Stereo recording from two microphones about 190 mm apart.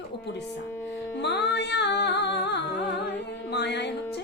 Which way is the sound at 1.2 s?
65° left (ahead or behind).